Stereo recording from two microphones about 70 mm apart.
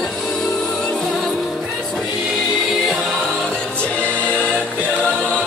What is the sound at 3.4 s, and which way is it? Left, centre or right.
Music, centre.